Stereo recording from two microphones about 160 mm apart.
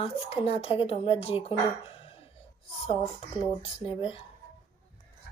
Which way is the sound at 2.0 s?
35° left (ahead or behind).